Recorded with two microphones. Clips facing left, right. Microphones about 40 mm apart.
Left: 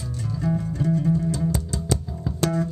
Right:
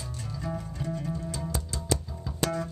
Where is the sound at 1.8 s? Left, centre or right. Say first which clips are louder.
Left 4 dB; centre.